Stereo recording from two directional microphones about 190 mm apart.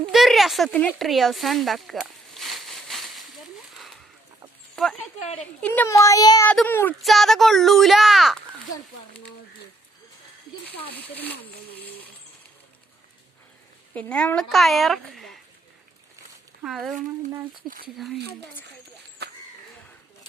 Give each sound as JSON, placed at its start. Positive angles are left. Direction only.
{"t": 0.0, "sound": "a sound", "side_deg": 0}
{"t": 4.7, "sound": "speech", "side_deg": 0}
{"t": 5.2, "sound": "a woman's voice", "side_deg": 35}
{"t": 5.6, "sound": "a child's voice", "side_deg": 10}
{"t": 6.5, "sound": "a child's voice", "side_deg": 10}
{"t": 11.1, "sound": "a child's voice", "side_deg": 10}
{"t": 13.9, "sound": "speech", "side_deg": 5}
{"t": 16.6, "sound": "speech", "side_deg": 0}
{"t": 17.9, "sound": "speech", "side_deg": 0}
{"t": 19.2, "sound": "a sound", "side_deg": -60}